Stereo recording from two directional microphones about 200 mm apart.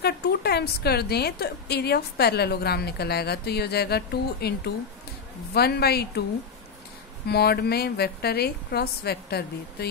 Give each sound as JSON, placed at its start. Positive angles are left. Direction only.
{"t": 0.0, "sound": "a woman's voice", "side_deg": 55}
{"t": 7.2, "sound": "a woman's voice", "side_deg": 55}